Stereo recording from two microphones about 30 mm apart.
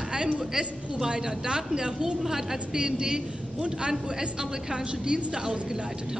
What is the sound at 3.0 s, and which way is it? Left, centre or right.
A woman's voice, right.